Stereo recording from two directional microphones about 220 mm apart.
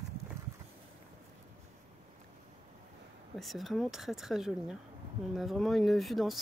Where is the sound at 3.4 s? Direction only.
Centre (ahead or behind).